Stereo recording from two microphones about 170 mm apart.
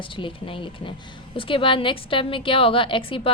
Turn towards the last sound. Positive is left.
turn(degrees=30)  # may be behind; listen again after turning